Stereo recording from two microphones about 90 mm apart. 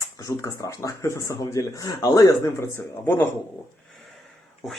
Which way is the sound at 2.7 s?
25° left (ahead or behind).